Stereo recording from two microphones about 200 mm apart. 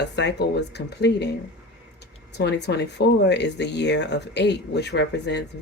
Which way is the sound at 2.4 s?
60° left (ahead or behind).